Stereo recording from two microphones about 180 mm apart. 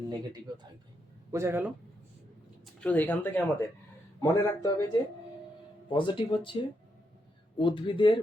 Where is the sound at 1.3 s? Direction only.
15° right (ahead or behind).